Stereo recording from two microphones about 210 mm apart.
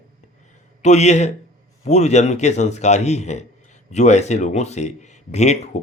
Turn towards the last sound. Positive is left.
turn(degrees=30)  # may be behind; listen again after turning